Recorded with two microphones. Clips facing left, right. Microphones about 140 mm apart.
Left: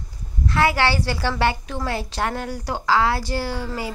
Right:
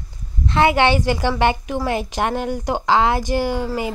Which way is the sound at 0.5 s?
20° right (ahead or behind).